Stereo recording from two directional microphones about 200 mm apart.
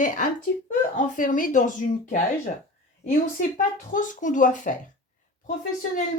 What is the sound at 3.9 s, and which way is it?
Speech, 40° left (ahead or behind).